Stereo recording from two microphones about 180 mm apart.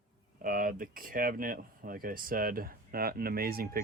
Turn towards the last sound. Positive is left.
turn(degrees=-55)  # may be behind; listen again after turning